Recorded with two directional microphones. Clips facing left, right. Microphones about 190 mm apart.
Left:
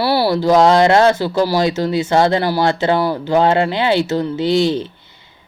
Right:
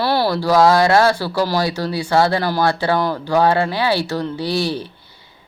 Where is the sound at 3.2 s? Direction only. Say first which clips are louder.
Left 1 dB; 20° left (ahead or behind).